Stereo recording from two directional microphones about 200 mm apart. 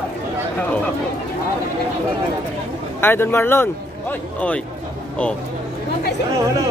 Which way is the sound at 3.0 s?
10° left (ahead or behind).